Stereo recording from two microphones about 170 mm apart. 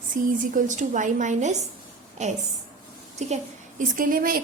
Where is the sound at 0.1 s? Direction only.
50° right (ahead or behind).